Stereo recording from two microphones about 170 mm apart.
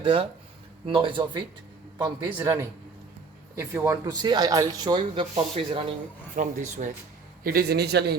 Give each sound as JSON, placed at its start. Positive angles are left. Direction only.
{"t": 0.0, "sound": "speech", "side_deg": -30}
{"t": 3.8, "sound": "speech", "side_deg": -20}
{"t": 6.3, "sound": "speech", "side_deg": -45}
{"t": 7.4, "sound": "a man's voice", "side_deg": -65}